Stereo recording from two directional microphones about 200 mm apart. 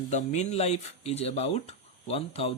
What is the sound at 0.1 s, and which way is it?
Speech, 35° left (ahead or behind).